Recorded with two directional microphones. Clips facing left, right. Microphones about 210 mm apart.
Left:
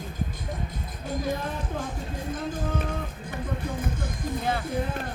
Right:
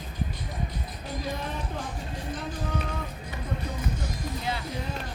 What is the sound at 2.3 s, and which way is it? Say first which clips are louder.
Music: left 3 dB; 50° left (ahead or behind).